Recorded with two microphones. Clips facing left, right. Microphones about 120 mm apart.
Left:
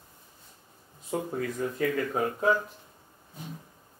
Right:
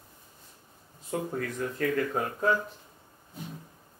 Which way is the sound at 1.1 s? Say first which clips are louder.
Left 1 dB; 10° left (ahead or behind).